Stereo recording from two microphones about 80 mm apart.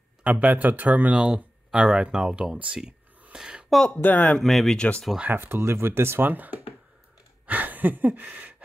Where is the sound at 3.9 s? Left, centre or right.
Centre.